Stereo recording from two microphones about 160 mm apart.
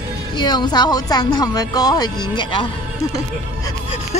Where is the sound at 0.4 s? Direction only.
25° left (ahead or behind).